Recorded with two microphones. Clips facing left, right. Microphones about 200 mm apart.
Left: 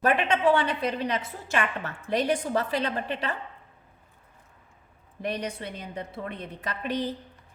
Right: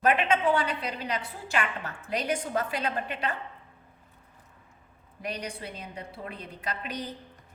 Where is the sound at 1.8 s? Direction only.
35° left (ahead or behind).